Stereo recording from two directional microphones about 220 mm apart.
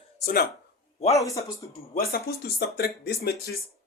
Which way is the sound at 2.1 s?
45° left (ahead or behind).